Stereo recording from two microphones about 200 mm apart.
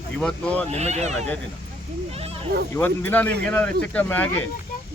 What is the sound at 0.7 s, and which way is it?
Speech, 35° right (ahead or behind).